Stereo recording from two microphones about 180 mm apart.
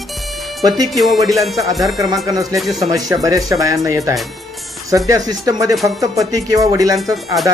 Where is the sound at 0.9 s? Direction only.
Centre (ahead or behind).